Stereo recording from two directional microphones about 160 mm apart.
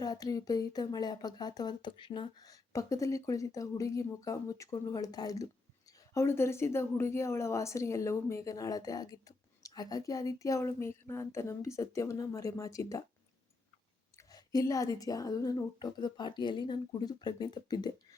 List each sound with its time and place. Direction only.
0.0 s speech: 25° left (ahead or behind)
14.2 s speech: 25° left (ahead or behind)